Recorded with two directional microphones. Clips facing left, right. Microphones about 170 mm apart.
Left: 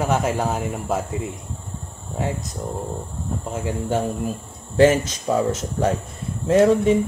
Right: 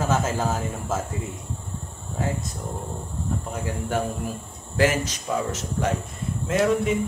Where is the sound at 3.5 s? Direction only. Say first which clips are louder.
Left 5 dB; 25° left (ahead or behind).